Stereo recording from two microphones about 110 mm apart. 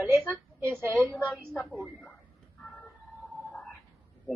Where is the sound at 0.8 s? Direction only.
Centre (ahead or behind).